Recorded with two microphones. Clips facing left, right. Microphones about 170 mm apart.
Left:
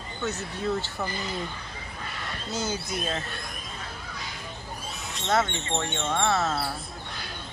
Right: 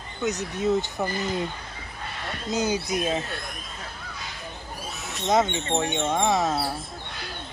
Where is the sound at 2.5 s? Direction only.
15° right (ahead or behind).